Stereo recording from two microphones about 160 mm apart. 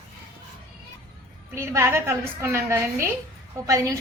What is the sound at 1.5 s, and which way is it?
A woman's voice, 15° right (ahead or behind).